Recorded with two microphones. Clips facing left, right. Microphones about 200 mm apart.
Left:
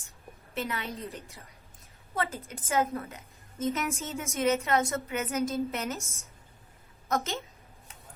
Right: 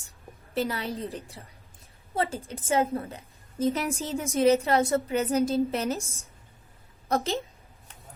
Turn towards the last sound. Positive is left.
turn(degrees=-35)  # may be behind; listen again after turning